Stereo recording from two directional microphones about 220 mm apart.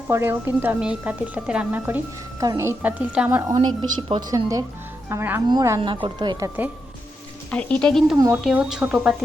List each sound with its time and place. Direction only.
0.1 s a woman's voice: 10° right (ahead or behind)
7.5 s speech: 5° left (ahead or behind)
8.1 s speech: 10° right (ahead or behind)